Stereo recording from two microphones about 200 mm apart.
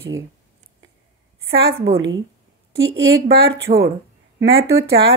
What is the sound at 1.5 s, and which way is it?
A woman's voice, 55° right (ahead or behind).